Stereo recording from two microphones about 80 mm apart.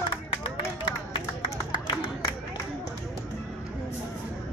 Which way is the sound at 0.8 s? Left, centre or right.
Left.